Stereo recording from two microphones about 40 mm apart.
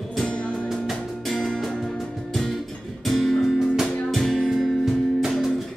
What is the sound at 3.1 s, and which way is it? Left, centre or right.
Music, centre.